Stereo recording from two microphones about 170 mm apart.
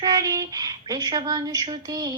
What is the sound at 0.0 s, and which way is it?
Speech, 20° right (ahead or behind).